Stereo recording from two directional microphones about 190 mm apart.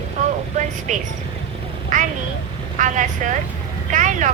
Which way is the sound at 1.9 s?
40° right (ahead or behind).